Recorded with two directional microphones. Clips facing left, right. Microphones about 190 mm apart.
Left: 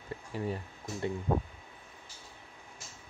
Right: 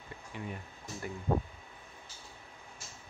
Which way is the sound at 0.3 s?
35° left (ahead or behind).